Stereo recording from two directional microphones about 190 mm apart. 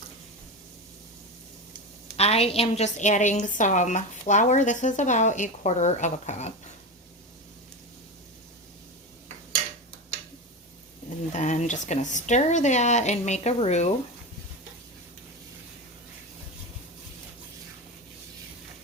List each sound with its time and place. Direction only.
2.1 s a woman's voice: 30° left (ahead or behind)
11.3 s a woman's voice: 40° left (ahead or behind)